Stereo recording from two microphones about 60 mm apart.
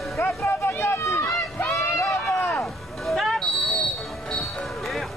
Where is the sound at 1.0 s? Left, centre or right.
Left.